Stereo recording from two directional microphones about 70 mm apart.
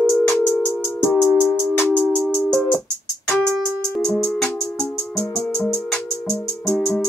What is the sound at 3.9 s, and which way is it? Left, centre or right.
Music, centre.